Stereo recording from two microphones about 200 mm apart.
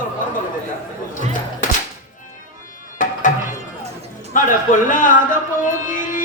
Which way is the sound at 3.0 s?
40° left (ahead or behind).